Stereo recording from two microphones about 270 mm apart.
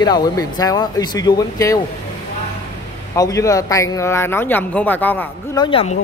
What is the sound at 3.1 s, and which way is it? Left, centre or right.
Speech, centre.